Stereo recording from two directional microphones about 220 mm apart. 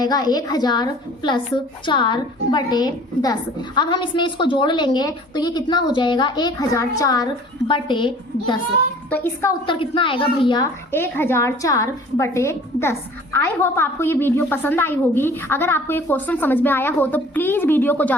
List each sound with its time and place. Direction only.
0.0 s a woman's voice: 15° left (ahead or behind)
9.0 s a woman's voice: 10° left (ahead or behind)
9.6 s a woman's voice: 25° left (ahead or behind); by 18.2 s 5° left (ahead or behind)